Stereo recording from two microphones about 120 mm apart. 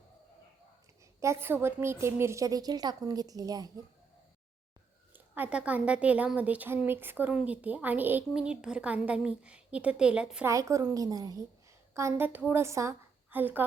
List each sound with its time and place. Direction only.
1.2 s a woman's voice: 20° right (ahead or behind)
5.1 s a woman's voice: 15° right (ahead or behind)
8.3 s a woman's voice: 5° right (ahead or behind)
10.4 s a woman's voice: 25° right (ahead or behind)
11.9 s a woman's voice: 20° right (ahead or behind)